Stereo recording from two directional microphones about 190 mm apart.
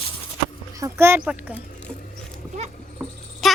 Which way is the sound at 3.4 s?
Centre (ahead or behind).